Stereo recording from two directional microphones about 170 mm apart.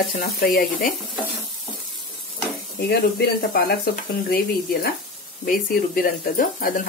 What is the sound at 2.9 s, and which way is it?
Speech, 70° left (ahead or behind).